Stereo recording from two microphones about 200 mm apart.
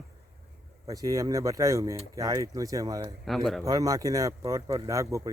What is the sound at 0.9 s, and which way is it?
Speech, 15° right (ahead or behind).